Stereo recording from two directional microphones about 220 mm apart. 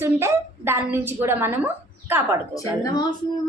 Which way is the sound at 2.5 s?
15° left (ahead or behind).